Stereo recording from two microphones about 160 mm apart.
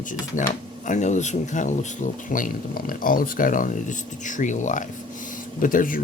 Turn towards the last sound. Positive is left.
turn(degrees=60)  # may be behind; listen again after turning